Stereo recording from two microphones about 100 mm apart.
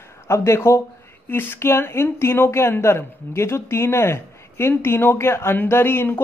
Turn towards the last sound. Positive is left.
turn(degrees=20)  # may be behind; listen again after turning